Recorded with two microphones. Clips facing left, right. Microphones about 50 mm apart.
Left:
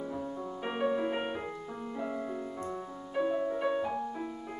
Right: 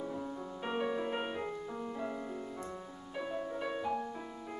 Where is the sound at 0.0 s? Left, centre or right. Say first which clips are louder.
Left 3 dB; centre.